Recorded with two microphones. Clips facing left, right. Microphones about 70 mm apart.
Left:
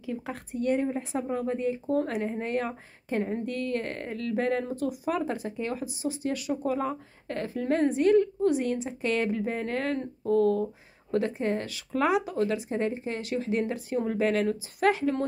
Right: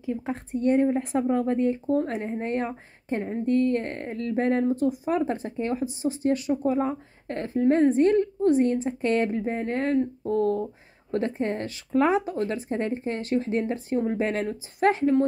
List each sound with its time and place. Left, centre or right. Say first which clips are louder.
0.0 s speech: right 5 dB; right
0.6 s speech: right 5 dB; right
1.9 s speech: right 2 dB; right
7.9 s speech: right 1 dB; right
9.4 s speech: right 3 dB; right